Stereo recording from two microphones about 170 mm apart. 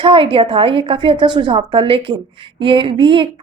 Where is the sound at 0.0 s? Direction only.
30° right (ahead or behind).